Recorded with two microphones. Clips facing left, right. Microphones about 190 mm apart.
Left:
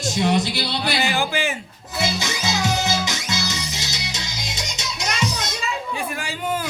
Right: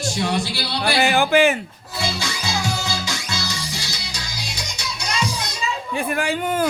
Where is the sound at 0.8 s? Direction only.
55° right (ahead or behind).